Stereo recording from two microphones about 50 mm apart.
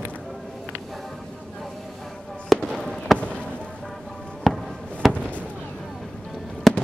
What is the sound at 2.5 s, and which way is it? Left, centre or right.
Fireworks, centre.